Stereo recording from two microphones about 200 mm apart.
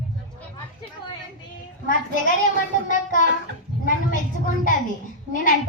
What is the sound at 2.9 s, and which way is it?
Speech, 40° left (ahead or behind).